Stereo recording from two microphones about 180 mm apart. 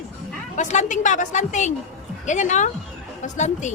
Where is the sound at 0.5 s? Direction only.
40° left (ahead or behind).